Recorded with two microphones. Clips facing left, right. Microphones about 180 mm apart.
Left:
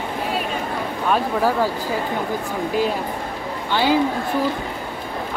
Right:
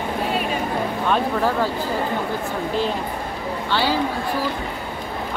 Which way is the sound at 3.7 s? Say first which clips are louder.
Left 3 dB; 15° left (ahead or behind).